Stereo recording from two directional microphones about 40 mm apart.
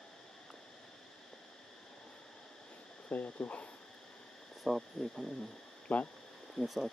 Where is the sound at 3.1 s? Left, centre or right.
Left.